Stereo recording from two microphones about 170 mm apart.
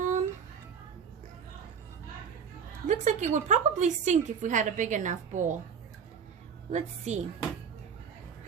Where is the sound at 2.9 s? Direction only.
45° right (ahead or behind).